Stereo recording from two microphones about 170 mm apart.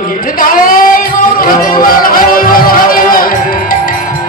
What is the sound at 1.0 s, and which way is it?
Music, 55° left (ahead or behind).